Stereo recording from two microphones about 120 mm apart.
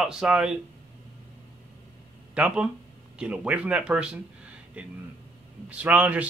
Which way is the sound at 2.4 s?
10° right (ahead or behind).